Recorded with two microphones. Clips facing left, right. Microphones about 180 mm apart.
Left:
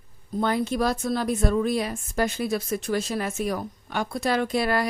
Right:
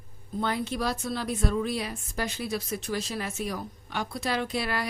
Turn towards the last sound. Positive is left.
turn(degrees=45)  # may be behind; listen again after turning